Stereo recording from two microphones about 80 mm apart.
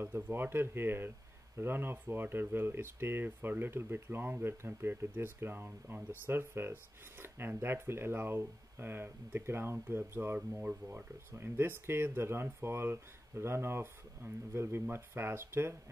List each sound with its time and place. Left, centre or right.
0.0 s speech: right